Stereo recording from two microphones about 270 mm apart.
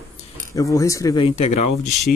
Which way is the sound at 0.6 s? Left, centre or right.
Centre.